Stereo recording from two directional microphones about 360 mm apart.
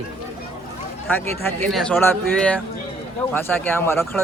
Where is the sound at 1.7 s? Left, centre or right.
Centre.